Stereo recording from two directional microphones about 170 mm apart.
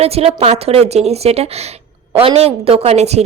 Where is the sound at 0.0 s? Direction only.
35° right (ahead or behind).